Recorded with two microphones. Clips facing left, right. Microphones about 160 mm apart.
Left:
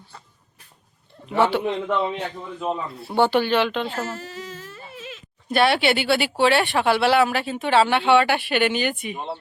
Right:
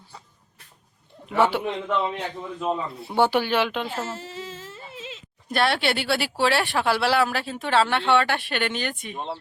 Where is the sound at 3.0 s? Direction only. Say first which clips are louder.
Left 3 dB; 15° right (ahead or behind).